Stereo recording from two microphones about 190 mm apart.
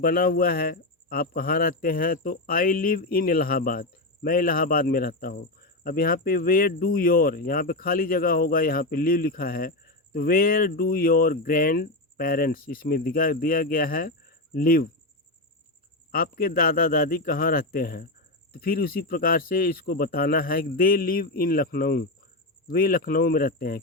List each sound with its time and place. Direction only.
0.0 s speech: 50° left (ahead or behind)
16.1 s speech: 50° left (ahead or behind)